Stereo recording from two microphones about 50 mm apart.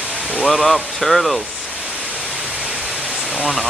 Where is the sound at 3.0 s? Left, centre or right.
Centre.